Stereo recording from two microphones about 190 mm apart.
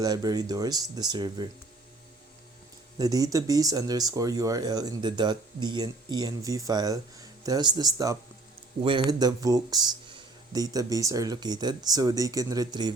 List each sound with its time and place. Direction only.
0.0 s speech: 20° right (ahead or behind)
3.0 s speech: 20° right (ahead or behind)